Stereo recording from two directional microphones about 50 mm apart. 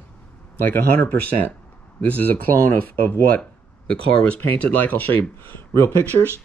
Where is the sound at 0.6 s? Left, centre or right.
Left.